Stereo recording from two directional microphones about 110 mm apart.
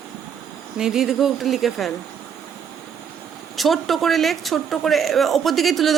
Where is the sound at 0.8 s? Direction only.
5° right (ahead or behind).